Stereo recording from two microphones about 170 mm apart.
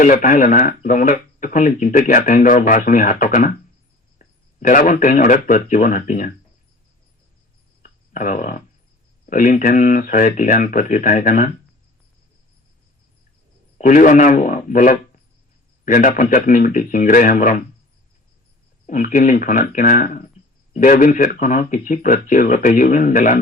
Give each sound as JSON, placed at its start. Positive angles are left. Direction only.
{"t": 0.0, "sound": "speech", "side_deg": 50}
{"t": 7.8, "sound": "cricket", "side_deg": 50}
{"t": 9.2, "sound": "speech", "side_deg": 50}
{"t": 13.7, "sound": "a man's voice", "side_deg": 50}
{"t": 18.9, "sound": "speech", "side_deg": 50}